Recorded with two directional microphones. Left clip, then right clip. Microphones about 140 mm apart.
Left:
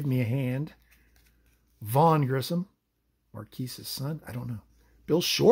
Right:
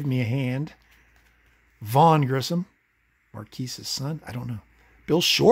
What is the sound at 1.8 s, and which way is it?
Speech, 15° right (ahead or behind).